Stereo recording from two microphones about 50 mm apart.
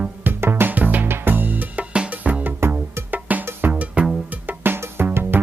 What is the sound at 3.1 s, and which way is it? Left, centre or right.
Music, right.